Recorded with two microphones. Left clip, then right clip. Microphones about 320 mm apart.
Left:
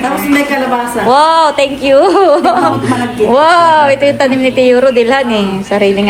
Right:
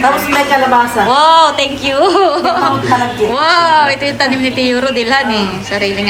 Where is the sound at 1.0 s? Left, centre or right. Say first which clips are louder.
Left 2 dB; centre.